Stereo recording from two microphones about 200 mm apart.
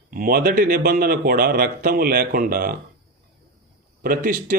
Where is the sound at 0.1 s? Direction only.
45° right (ahead or behind).